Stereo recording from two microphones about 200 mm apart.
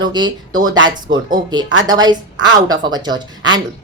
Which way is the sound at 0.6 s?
70° right (ahead or behind).